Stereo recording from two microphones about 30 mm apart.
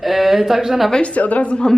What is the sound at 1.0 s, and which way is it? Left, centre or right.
Speech, left.